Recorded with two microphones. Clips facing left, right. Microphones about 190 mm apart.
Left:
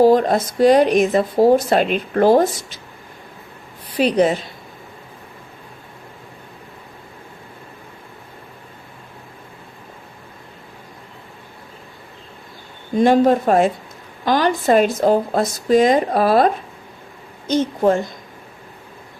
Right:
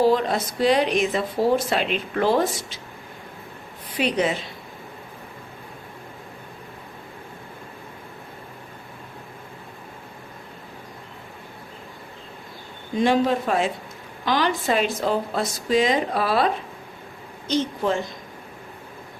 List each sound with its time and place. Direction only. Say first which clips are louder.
0.0 s speech: left 6 dB; 45° left (ahead or behind)
3.9 s a woman's voice: left 7 dB; 40° left (ahead or behind)
13.0 s speech: left 6 dB; 45° left (ahead or behind)
17.5 s speech: left 6 dB; 45° left (ahead or behind)